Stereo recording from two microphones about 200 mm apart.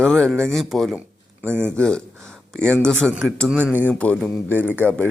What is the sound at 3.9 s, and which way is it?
Speech, 5° left (ahead or behind).